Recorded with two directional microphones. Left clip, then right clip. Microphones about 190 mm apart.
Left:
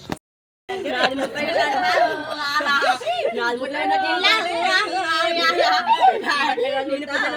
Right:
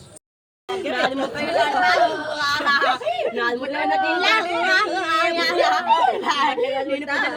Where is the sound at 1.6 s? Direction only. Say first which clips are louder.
Right 1 dB; 20° left (ahead or behind).